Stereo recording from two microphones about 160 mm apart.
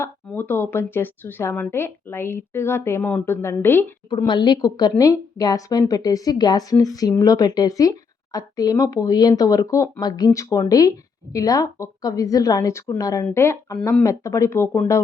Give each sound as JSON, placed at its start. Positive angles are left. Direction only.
{"t": 0.0, "sound": "a woman's voice", "side_deg": 10}
{"t": 4.3, "sound": "a woman's voice", "side_deg": 30}